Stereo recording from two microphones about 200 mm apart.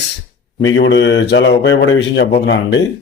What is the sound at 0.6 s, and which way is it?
Speech, 65° left (ahead or behind).